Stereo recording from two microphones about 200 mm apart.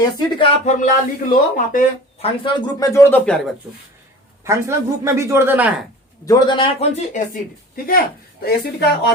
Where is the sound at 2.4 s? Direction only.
20° left (ahead or behind).